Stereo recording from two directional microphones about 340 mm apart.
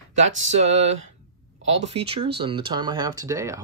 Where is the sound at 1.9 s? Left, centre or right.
Centre.